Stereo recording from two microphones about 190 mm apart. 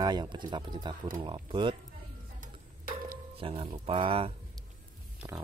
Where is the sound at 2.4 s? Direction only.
45° right (ahead or behind).